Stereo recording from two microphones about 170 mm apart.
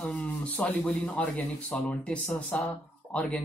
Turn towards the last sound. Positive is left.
turn(degrees=5)  # may be behind; listen again after turning